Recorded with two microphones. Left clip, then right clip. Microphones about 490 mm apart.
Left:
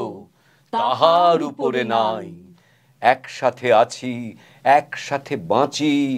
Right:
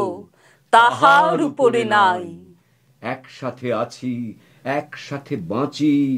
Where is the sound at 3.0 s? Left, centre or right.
Left.